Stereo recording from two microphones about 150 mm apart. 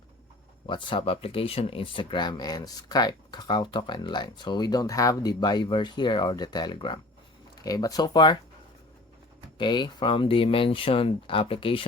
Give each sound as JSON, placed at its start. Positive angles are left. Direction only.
{"t": 0.7, "sound": "speech", "side_deg": 35}
{"t": 9.6, "sound": "speech", "side_deg": 30}